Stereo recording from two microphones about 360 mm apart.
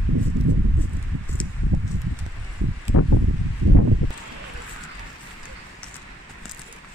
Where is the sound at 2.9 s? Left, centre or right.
Left.